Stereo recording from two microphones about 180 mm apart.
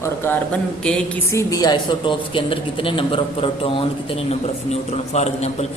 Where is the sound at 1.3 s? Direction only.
15° left (ahead or behind).